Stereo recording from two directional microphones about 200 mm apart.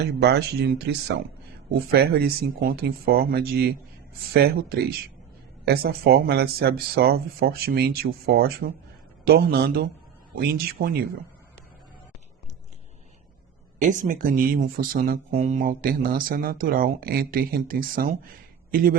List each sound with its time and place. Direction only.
0.0 s speech: 55° right (ahead or behind)
13.7 s speech: 40° right (ahead or behind)
15.3 s speech: 35° right (ahead or behind)